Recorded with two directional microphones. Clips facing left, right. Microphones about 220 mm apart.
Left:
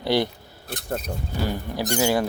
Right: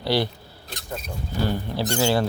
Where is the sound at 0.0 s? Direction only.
20° left (ahead or behind).